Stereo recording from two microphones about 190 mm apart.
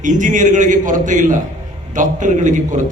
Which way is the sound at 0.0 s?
40° right (ahead or behind).